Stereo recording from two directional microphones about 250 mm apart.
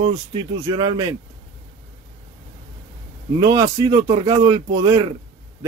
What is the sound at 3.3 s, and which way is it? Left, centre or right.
Speech, centre.